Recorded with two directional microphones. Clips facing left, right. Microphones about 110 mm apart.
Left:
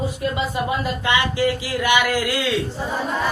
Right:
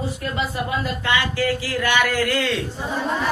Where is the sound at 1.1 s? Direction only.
20° left (ahead or behind).